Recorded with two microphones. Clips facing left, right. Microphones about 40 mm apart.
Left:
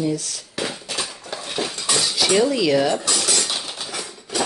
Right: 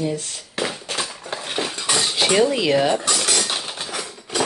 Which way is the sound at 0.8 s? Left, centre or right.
Right.